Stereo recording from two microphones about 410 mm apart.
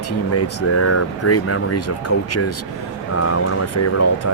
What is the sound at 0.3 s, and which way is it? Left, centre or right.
Speech, left.